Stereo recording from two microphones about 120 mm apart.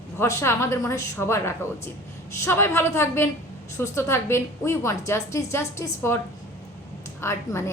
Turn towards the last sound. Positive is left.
turn(degrees=20)  # may be behind; listen again after turning